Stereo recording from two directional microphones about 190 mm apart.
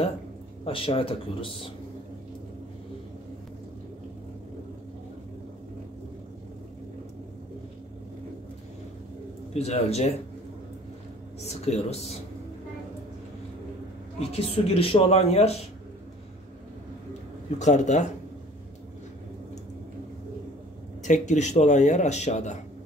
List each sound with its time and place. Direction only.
0.7 s speech: 30° left (ahead or behind)
9.5 s speech: 35° left (ahead or behind)
11.4 s speech: 35° left (ahead or behind)
14.2 s speech: 30° left (ahead or behind)
17.6 s speech: 40° left (ahead or behind)
21.0 s speech: 40° left (ahead or behind)